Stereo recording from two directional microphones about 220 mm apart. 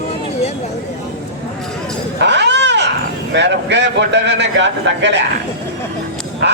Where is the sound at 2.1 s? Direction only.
50° right (ahead or behind).